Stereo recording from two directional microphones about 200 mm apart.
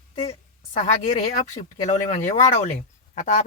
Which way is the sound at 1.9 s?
35° left (ahead or behind).